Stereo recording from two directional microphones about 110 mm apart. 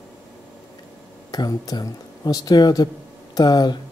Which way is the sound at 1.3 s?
35° left (ahead or behind).